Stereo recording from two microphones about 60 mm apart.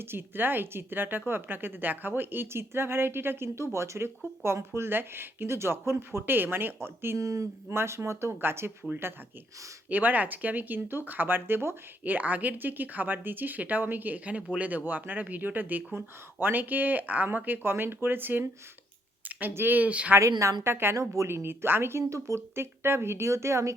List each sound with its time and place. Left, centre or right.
0.0 s a woman's voice: right
7.2 s a woman's voice: right
7.7 s a woman's voice: right
9.9 s speech: right
20.1 s a woman's voice: right